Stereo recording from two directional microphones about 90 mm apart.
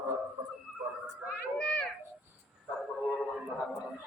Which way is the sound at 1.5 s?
10° left (ahead or behind).